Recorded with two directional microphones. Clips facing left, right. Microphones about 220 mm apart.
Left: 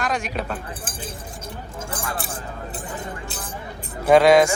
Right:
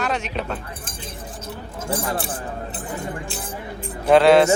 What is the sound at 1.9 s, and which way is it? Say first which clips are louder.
Speech: right 7 dB; 25° right (ahead or behind).